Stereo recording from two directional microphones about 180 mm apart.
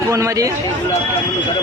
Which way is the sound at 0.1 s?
15° right (ahead or behind).